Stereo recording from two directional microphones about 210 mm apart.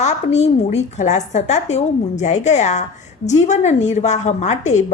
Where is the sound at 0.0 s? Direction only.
30° left (ahead or behind).